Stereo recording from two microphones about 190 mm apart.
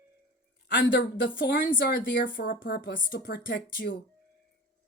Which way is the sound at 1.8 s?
50° left (ahead or behind).